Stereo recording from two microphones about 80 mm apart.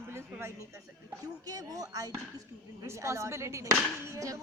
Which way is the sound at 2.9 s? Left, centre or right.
Right.